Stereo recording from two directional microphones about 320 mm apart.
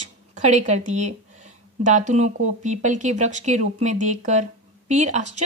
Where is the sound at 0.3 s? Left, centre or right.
Right.